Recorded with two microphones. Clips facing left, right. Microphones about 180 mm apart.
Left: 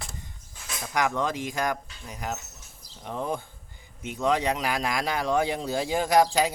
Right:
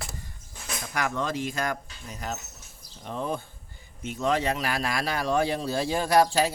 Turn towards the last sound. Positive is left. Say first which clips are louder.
# even
turn(degrees=15)  # may be behind; listen again after turning